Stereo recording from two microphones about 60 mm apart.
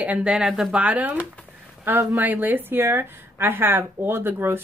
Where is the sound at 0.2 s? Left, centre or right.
Centre.